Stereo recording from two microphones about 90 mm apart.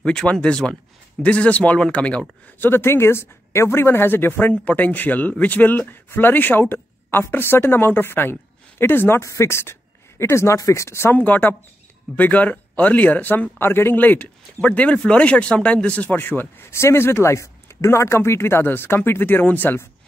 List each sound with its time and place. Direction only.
0.0 s speech: 10° left (ahead or behind)
2.7 s speech: 25° left (ahead or behind)
9.2 s speech: 35° left (ahead or behind)
11.1 s speech: 20° left (ahead or behind)